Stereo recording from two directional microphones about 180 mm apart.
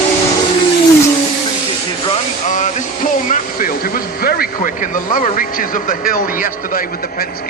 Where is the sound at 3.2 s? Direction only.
50° left (ahead or behind).